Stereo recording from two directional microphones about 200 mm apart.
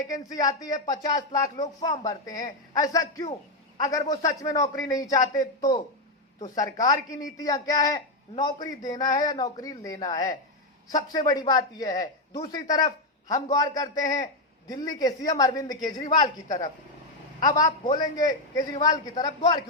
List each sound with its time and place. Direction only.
0.1 s a man's voice: 20° left (ahead or behind)
6.4 s a man's voice: 20° left (ahead or behind)